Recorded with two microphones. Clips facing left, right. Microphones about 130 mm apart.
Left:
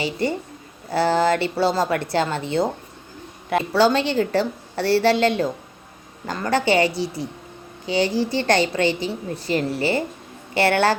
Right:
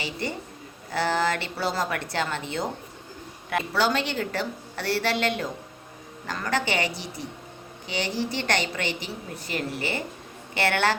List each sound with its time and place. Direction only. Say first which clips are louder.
0.0 s a woman's voice: left 8 dB; 30° left (ahead or behind)
7.9 s a woman's voice: left 8 dB; 35° left (ahead or behind)